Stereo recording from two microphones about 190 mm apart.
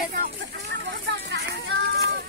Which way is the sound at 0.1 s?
50° right (ahead or behind).